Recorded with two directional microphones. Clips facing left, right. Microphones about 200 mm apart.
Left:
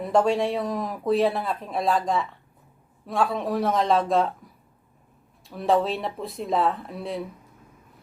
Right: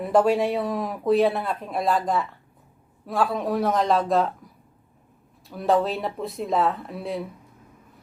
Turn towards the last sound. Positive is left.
turn(degrees=0)  # may be behind; listen again after turning